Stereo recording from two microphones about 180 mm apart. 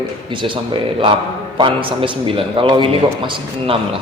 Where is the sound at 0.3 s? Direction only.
25° right (ahead or behind).